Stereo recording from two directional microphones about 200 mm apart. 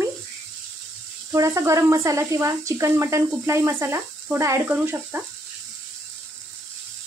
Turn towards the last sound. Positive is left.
turn(degrees=-10)  # may be behind; listen again after turning